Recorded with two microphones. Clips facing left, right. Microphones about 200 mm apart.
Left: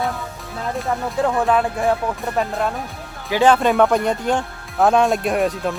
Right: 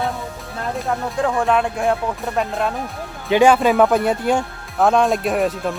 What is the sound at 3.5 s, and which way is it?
Speech, 5° right (ahead or behind).